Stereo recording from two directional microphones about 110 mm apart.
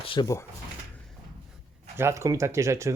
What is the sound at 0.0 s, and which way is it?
Drawer open or close, 50° left (ahead or behind).